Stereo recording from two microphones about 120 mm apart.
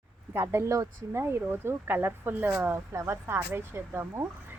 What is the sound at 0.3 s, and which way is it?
Speech, 20° right (ahead or behind).